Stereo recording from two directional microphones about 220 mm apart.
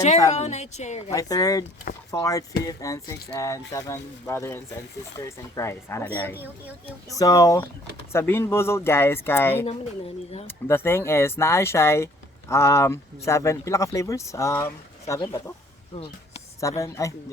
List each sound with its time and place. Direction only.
0.3 s speech: 30° left (ahead or behind)
1.1 s speech: 15° left (ahead or behind)
6.3 s speech: 10° right (ahead or behind)
7.1 s speech: 15° left (ahead or behind)
16.6 s speech: 15° left (ahead or behind)